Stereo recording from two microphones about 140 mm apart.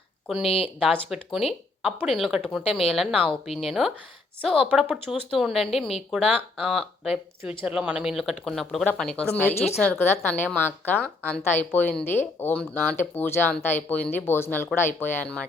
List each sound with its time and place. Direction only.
0.4 s speech: 45° left (ahead or behind)
0.8 s speech: centre (ahead or behind)
9.6 s speech: 5° right (ahead or behind)
9.8 s speech: 15° left (ahead or behind)